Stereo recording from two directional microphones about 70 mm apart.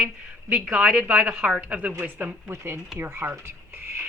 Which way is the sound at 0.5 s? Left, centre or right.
Centre.